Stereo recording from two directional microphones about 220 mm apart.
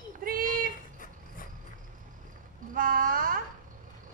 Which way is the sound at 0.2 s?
40° right (ahead or behind).